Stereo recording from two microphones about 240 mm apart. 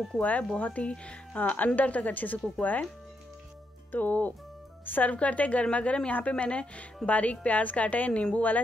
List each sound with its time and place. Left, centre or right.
0.0 s speech: centre
3.9 s a woman's voice: centre